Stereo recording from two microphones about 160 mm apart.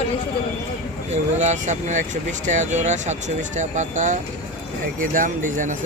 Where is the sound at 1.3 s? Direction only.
50° right (ahead or behind).